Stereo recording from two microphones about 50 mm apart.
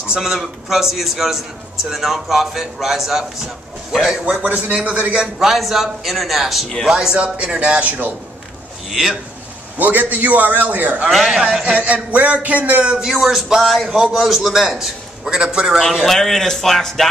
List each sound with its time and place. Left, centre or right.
0.1 s a man's voice: centre
4.4 s a man's voice: right
5.2 s a man's voice: centre
6.9 s a man's voice: centre
8.9 s a man's voice: centre
9.8 s a man's voice: right
11.1 s a man's voice: centre
11.6 s a man's voice: right
12.8 s a man's voice: centre
13.1 s a man's voice: centre
15.2 s a man's voice: centre
15.8 s a man's voice: centre